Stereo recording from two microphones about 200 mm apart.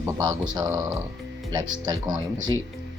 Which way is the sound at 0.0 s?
20° right (ahead or behind).